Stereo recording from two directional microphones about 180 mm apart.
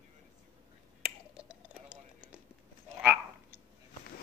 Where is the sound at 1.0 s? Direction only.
5° right (ahead or behind).